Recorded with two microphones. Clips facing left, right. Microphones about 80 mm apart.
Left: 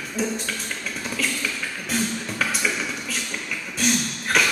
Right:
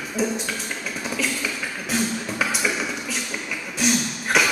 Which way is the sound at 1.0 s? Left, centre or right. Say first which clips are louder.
Right 1 dB; centre.